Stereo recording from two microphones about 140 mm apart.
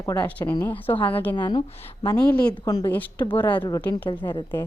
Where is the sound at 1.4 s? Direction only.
30° left (ahead or behind).